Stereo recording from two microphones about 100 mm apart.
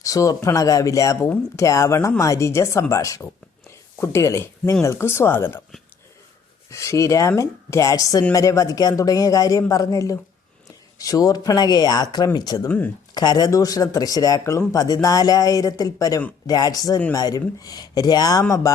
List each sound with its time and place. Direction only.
0.0 s a man's voice: 35° left (ahead or behind)
6.7 s a man's voice: 30° left (ahead or behind)
12.6 s speech: 15° left (ahead or behind)
13.1 s a man's voice: 40° left (ahead or behind)